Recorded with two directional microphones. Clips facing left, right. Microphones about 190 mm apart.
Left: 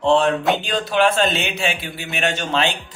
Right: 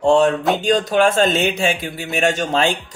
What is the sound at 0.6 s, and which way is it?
Speech, 45° right (ahead or behind).